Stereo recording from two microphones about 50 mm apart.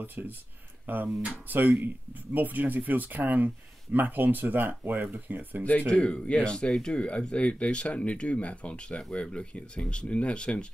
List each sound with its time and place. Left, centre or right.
0.2 s speech: right
5.6 s speech: left